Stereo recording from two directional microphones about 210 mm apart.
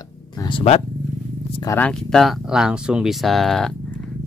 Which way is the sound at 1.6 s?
10° left (ahead or behind).